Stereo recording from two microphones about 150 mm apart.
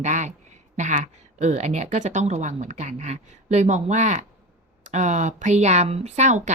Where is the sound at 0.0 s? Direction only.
55° right (ahead or behind).